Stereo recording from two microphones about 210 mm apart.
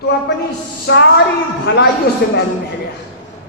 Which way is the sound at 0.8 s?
55° left (ahead or behind).